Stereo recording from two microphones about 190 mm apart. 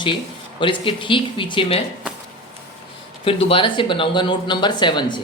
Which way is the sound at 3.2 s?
30° left (ahead or behind).